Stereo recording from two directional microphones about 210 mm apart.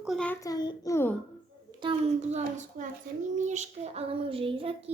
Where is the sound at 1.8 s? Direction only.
30° right (ahead or behind).